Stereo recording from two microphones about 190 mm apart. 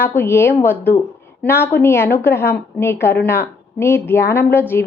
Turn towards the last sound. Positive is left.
turn(degrees=10)  # may be behind; listen again after turning